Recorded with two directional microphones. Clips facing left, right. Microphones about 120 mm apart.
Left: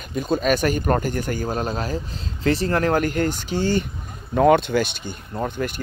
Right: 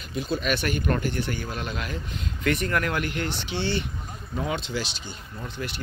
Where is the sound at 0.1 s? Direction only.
45° left (ahead or behind).